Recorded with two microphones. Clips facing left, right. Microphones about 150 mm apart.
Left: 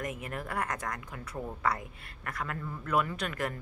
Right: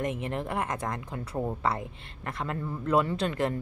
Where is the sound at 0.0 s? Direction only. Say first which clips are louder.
Right 6 dB; 25° right (ahead or behind).